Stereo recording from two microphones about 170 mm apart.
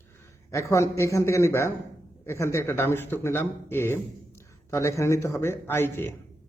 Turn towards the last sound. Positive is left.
turn(degrees=15)  # may be behind; listen again after turning